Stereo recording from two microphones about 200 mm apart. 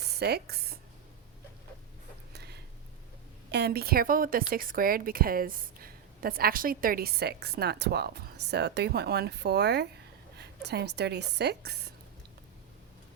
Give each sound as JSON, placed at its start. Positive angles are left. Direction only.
{"t": 0.1, "sound": "speech", "side_deg": -55}
{"t": 2.3, "sound": "a sound", "side_deg": -55}
{"t": 3.5, "sound": "a woman's voice", "side_deg": -55}